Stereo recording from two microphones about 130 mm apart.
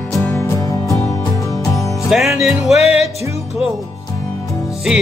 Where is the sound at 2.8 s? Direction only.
55° left (ahead or behind).